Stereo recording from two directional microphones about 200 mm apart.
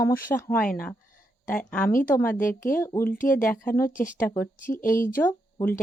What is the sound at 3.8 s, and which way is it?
Speech, 40° left (ahead or behind).